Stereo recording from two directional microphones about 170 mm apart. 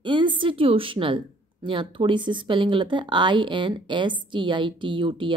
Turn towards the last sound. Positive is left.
turn(degrees=-30)  # may be behind; listen again after turning